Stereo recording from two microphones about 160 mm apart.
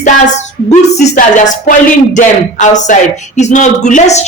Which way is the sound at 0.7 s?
50° left (ahead or behind).